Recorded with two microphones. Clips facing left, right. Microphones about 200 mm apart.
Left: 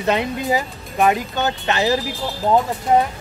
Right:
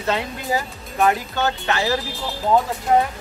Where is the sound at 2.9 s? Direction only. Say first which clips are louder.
Left 1 dB; 5° left (ahead or behind).